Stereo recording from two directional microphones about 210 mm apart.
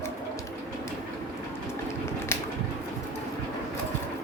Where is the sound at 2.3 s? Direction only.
10° left (ahead or behind).